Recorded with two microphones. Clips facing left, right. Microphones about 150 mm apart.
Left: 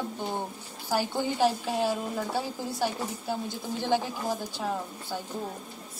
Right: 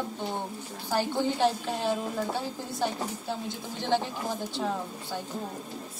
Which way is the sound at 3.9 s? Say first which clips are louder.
Even; 5° left (ahead or behind).